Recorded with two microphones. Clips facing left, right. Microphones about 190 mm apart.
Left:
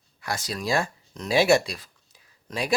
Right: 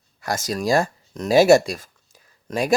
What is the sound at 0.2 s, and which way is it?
Speech, 45° right (ahead or behind).